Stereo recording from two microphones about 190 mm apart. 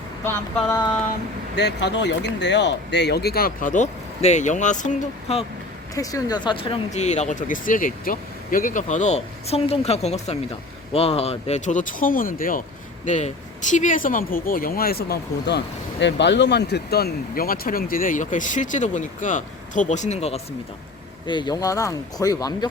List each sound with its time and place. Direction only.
0.3 s a sound: 10° left (ahead or behind)
1.5 s speech: 65° left (ahead or behind); by 5.5 s 35° left (ahead or behind)
5.9 s speech: 20° left (ahead or behind); by 20.4 s 35° left (ahead or behind)
21.2 s speech: 25° left (ahead or behind)